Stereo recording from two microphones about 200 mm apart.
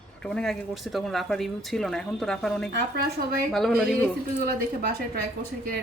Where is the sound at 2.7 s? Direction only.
55° right (ahead or behind).